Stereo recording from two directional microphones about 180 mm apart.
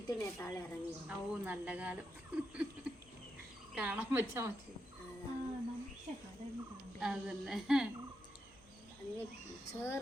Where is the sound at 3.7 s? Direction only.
10° right (ahead or behind).